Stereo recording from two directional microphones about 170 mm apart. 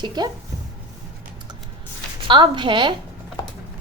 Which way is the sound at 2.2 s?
30° right (ahead or behind).